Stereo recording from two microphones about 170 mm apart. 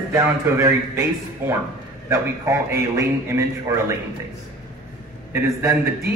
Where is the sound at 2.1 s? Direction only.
15° right (ahead or behind).